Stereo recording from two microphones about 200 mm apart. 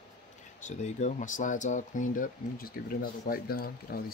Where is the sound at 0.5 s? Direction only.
35° left (ahead or behind).